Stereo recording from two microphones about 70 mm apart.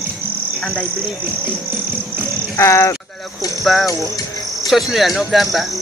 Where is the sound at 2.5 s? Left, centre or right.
Left.